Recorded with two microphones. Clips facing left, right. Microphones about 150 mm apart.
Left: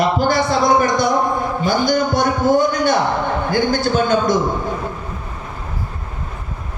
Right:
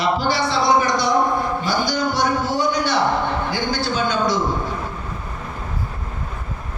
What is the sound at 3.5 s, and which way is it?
Speech, 50° left (ahead or behind).